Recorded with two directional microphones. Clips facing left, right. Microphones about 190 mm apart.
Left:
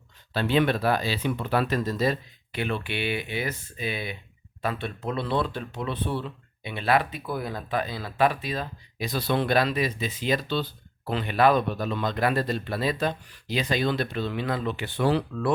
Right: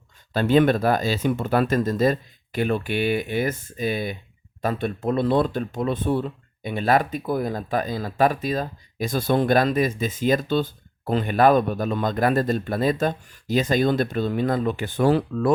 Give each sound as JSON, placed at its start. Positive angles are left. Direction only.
{"t": 0.3, "sound": "speech", "side_deg": -45}